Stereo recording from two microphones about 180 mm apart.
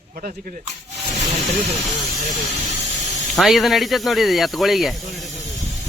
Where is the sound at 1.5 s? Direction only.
Centre (ahead or behind).